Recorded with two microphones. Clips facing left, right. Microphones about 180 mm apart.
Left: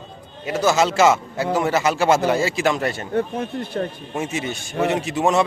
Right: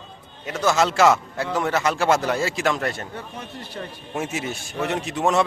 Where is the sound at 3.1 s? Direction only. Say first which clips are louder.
Left 12 dB; 55° left (ahead or behind).